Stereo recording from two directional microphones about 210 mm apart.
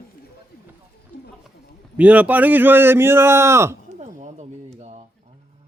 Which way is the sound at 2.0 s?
5° right (ahead or behind).